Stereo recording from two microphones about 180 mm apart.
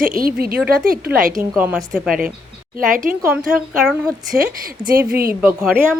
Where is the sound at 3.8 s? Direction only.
5° right (ahead or behind).